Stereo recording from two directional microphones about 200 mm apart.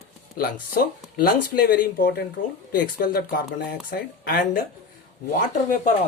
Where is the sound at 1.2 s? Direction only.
50° left (ahead or behind).